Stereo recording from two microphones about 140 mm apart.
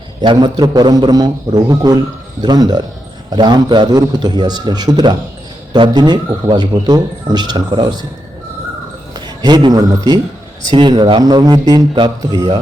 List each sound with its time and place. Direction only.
0.2 s a man's voice: 30° right (ahead or behind)
9.1 s a sound: 30° right (ahead or behind)
10.7 s speech: 30° right (ahead or behind)